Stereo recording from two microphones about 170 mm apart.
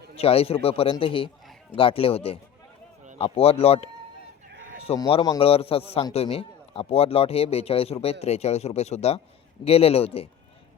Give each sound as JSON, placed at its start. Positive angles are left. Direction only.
{"t": 0.2, "sound": "a man's voice", "side_deg": 35}
{"t": 4.9, "sound": "a man's voice", "side_deg": 35}